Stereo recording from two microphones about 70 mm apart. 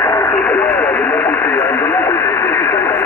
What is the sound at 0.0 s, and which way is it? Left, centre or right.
Radio, left.